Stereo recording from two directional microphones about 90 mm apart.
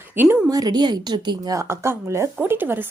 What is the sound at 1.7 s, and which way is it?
A woman's voice, 30° right (ahead or behind).